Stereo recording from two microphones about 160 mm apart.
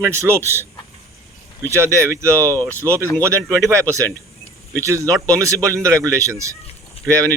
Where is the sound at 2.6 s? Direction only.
10° left (ahead or behind).